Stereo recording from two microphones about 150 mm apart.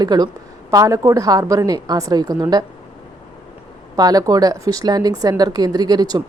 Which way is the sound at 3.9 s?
25° right (ahead or behind).